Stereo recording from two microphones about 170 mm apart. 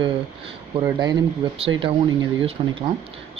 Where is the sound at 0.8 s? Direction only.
25° right (ahead or behind).